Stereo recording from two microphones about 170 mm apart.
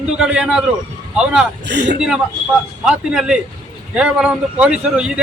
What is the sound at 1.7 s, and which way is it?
Speech, 90° right.